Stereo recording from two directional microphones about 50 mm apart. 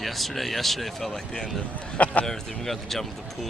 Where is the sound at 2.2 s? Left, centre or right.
Centre.